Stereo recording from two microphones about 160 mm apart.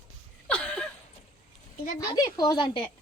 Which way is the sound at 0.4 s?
5° left (ahead or behind).